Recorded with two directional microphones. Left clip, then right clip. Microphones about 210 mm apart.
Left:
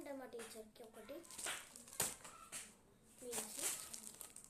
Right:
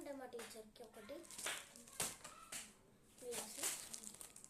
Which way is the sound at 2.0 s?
30° left (ahead or behind).